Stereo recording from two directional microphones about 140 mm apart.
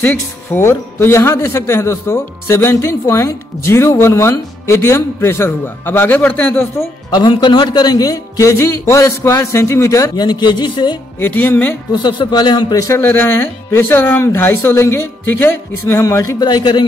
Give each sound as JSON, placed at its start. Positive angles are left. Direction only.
{"t": 0.0, "sound": "speech", "side_deg": 15}
{"t": 7.1, "sound": "a man's voice", "side_deg": 30}
{"t": 10.1, "sound": "speech", "side_deg": 30}
{"t": 11.1, "sound": "speech", "side_deg": 15}
{"t": 11.9, "sound": "a man's voice", "side_deg": 35}